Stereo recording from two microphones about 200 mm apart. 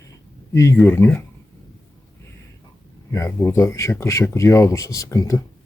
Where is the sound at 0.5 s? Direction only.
15° left (ahead or behind).